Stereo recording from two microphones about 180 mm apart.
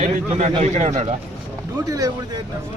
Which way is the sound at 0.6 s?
40° right (ahead or behind).